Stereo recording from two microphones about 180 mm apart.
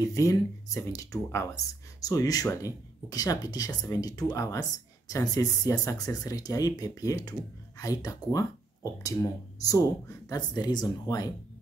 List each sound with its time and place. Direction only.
0.0 s speech: 20° left (ahead or behind)
9.6 s speech: 20° left (ahead or behind)